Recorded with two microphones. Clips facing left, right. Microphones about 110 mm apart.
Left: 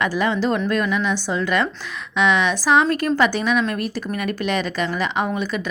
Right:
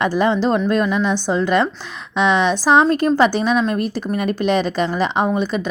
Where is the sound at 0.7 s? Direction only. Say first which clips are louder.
Right 3 dB; 30° right (ahead or behind).